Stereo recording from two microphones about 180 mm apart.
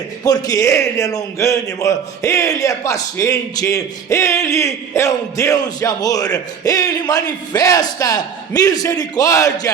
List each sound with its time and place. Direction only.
0.3 s speech: 20° left (ahead or behind)